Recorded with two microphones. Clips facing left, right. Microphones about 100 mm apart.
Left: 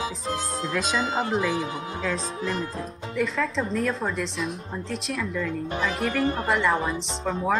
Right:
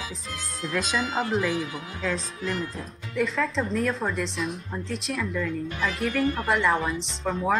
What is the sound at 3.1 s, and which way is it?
Speech, centre (ahead or behind).